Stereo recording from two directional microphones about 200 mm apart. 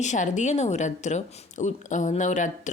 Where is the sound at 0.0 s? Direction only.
35° left (ahead or behind).